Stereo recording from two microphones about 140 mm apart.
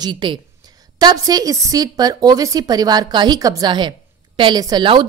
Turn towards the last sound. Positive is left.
turn(degrees=-35)  # may be behind; listen again after turning